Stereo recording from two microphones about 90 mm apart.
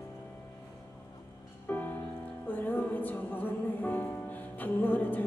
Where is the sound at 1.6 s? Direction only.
20° left (ahead or behind).